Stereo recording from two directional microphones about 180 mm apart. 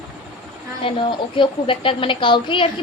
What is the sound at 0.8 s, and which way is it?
A woman's voice, 30° left (ahead or behind).